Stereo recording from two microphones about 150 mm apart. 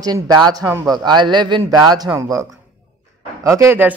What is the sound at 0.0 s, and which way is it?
A man's voice, 25° right (ahead or behind).